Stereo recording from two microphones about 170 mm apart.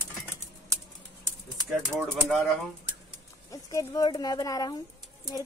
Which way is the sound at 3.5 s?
20° left (ahead or behind).